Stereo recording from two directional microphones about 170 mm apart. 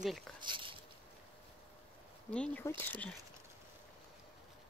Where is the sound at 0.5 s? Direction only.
30° right (ahead or behind).